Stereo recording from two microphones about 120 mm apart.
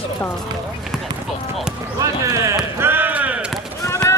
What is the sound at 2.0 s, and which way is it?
Speech, 25° right (ahead or behind).